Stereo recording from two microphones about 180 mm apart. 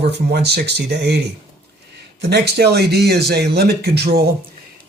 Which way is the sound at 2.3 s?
65° right (ahead or behind).